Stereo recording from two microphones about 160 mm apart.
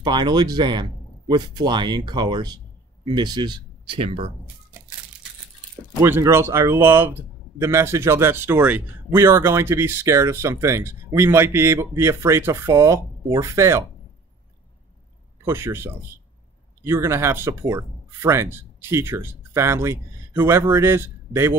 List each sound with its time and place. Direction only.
0.0 s speech: 25° right (ahead or behind)
6.0 s a man's voice: 15° right (ahead or behind)
15.4 s a man's voice: 15° right (ahead or behind)